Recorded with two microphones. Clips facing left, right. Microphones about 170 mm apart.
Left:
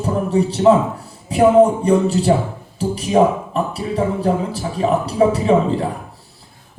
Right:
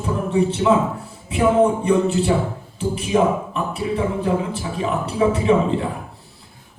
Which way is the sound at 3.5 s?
35° left (ahead or behind).